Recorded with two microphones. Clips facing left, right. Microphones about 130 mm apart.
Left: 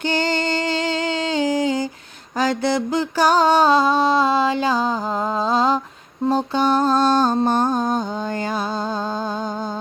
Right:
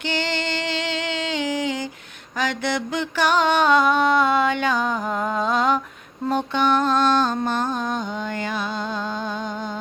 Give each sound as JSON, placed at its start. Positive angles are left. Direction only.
{"t": 0.1, "sound": "music", "side_deg": 40}
{"t": 5.4, "sound": "a sound", "side_deg": 30}
{"t": 6.2, "sound": "music", "side_deg": 35}